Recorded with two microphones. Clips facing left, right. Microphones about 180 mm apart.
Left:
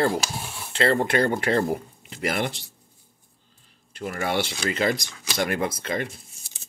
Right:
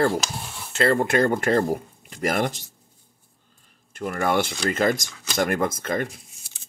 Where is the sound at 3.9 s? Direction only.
50° right (ahead or behind).